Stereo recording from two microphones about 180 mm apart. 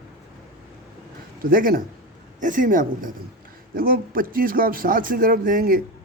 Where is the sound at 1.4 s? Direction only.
55° right (ahead or behind).